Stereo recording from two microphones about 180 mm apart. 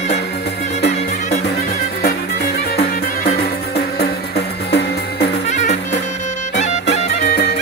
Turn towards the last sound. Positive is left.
turn(degrees=40)  # may be behind; listen again after turning